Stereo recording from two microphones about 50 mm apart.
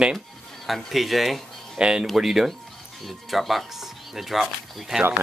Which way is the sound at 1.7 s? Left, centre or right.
Centre.